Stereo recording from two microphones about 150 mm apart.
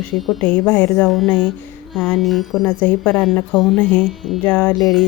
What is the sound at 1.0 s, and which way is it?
Speech, centre (ahead or behind).